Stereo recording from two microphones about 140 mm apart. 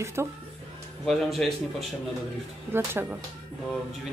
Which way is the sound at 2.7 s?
15° right (ahead or behind).